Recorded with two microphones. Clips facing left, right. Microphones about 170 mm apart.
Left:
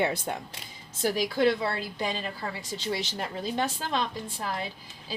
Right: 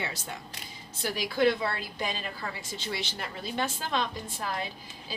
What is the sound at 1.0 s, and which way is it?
A woman's voice, 45° left (ahead or behind).